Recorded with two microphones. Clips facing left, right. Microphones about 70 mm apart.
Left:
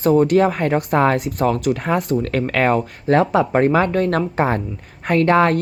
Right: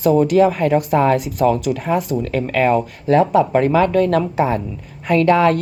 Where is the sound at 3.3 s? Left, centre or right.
Left.